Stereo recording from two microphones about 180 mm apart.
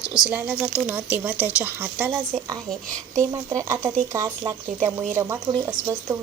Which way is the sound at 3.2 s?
15° right (ahead or behind).